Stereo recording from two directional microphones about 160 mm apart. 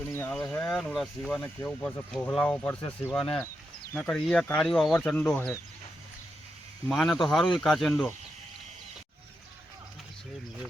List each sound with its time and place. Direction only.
0.1 s a sound: 15° left (ahead or behind)
0.3 s speech: 5° left (ahead or behind)
2.8 s speech: 20° left (ahead or behind)
3.9 s speech: 5° left (ahead or behind)
6.8 s speech: 5° left (ahead or behind)